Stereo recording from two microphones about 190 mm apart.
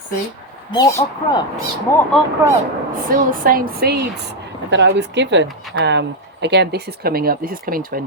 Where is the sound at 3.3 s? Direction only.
45° right (ahead or behind).